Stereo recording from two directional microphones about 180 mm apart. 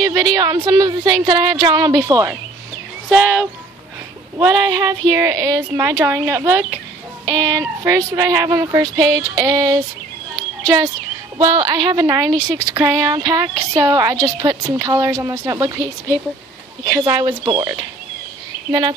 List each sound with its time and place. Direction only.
0.0 s speech: 20° right (ahead or behind)
11.3 s speech: 25° right (ahead or behind)
16.9 s speech: 20° right (ahead or behind)